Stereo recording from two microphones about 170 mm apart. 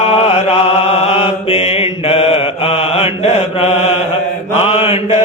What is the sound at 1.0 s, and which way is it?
Mantra, 35° left (ahead or behind).